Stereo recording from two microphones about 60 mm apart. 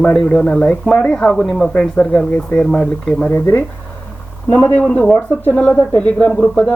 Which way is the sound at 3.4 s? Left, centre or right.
Left.